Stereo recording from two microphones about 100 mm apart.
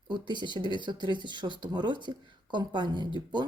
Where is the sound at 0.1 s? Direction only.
50° right (ahead or behind).